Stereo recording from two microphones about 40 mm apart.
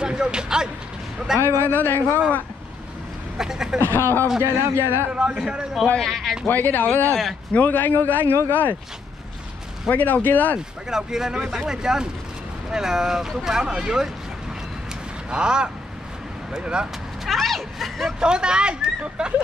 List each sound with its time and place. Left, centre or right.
0.0 s speech: right
1.4 s a man's voice: right
1.8 s speech: left
3.3 s speech: centre
3.9 s a man's voice: left
4.6 s a man's voice: right
5.1 s speech: right
5.9 s speech: centre
6.4 s speech: left
9.8 s speech: left
10.9 s speech: centre
15.2 s speech: right
17.3 s speech: centre
18.2 s speech: right